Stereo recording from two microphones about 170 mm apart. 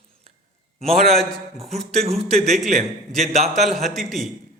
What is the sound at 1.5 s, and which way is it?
Speech, 35° right (ahead or behind).